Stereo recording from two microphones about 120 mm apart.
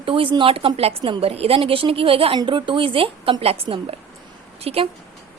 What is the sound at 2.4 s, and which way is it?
A woman's voice, 40° right (ahead or behind).